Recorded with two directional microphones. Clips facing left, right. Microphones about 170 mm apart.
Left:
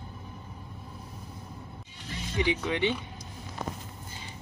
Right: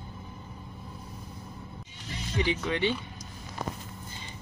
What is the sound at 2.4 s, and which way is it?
Speech, 15° left (ahead or behind).